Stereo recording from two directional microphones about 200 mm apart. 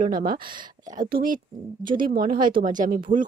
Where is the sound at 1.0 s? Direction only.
45° right (ahead or behind).